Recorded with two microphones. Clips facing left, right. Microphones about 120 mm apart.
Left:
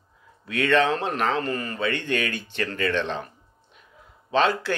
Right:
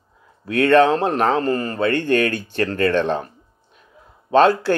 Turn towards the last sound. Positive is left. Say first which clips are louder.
# right 8 dB
turn(degrees=-45)  # may be behind; listen again after turning